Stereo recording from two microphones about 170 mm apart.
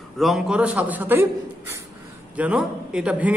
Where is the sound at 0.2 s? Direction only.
5° right (ahead or behind).